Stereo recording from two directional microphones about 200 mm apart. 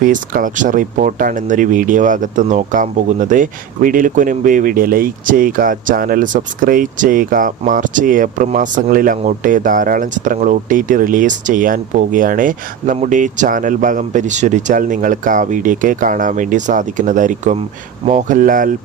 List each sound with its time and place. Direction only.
0.0 s speech: 40° right (ahead or behind)